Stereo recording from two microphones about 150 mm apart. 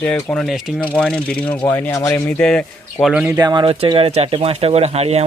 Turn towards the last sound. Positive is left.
turn(degrees=-45)  # may be behind; listen again after turning